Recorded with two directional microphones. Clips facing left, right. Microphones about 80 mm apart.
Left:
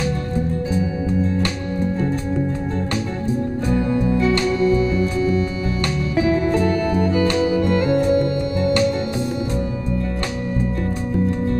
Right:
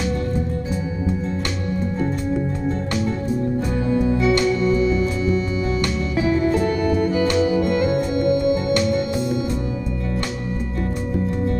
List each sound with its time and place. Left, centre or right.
10.8 s music: left